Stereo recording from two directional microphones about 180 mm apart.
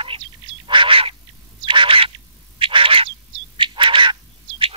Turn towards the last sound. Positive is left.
turn(degrees=-30)  # may be behind; listen again after turning